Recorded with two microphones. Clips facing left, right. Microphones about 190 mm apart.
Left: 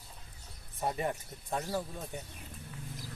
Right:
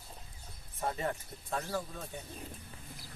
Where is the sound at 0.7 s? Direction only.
15° left (ahead or behind).